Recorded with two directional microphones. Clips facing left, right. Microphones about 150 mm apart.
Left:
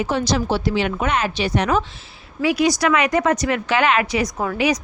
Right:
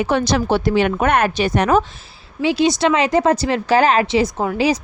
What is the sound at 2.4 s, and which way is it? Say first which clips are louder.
A woman's voice: right 2 dB; 25° right (ahead or behind).